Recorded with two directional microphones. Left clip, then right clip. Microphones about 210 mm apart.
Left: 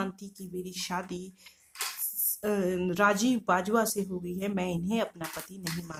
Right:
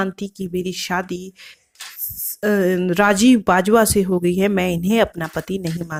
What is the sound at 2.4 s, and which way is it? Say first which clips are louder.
Speech: right 12 dB; 30° right (ahead or behind).